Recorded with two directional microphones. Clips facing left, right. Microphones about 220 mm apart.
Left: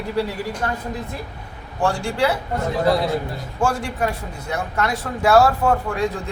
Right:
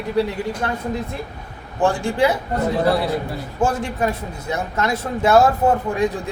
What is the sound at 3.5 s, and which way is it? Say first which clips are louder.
A man's voice: right 1 dB; 20° right (ahead or behind).